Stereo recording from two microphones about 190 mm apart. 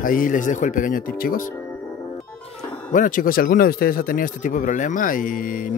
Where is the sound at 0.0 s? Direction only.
45° left (ahead or behind).